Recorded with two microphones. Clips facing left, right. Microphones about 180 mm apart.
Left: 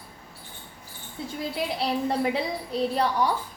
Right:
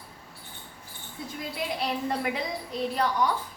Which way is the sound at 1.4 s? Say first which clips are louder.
Left 3 dB; 30° left (ahead or behind).